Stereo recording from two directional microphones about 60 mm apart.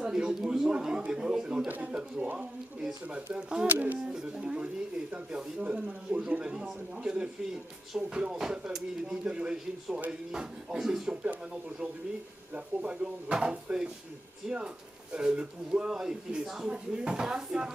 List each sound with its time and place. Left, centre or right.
0.0 s speech: centre
1.7 s a man's voice: right
3.3 s a man's voice: centre
3.6 s speech: right
4.1 s a man's voice: centre
12.5 s a man's voice: centre